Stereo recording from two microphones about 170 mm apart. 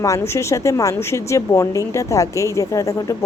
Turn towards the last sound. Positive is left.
turn(degrees=20)  # may be behind; listen again after turning